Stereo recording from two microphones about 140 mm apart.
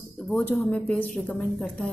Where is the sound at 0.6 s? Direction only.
10° left (ahead or behind).